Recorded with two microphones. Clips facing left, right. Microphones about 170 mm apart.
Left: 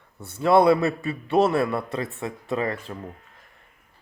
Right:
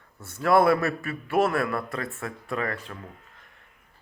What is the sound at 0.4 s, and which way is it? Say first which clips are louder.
A man's voice: left 3 dB; 20° left (ahead or behind).